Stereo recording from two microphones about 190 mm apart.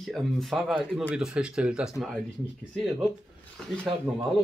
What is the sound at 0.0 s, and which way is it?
Speech, centre (ahead or behind).